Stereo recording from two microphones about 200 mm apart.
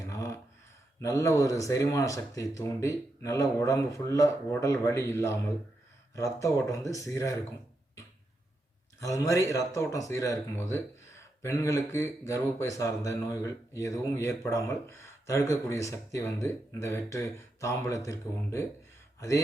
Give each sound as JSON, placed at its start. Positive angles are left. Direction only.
{"t": 0.0, "sound": "a sound", "side_deg": 15}
{"t": 1.0, "sound": "speech", "side_deg": 15}
{"t": 9.0, "sound": "speech", "side_deg": 15}